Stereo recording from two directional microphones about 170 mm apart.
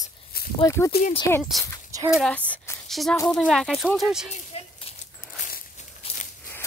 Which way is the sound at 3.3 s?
Centre (ahead or behind).